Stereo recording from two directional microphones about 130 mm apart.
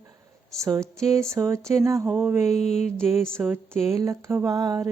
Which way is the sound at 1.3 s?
20° right (ahead or behind).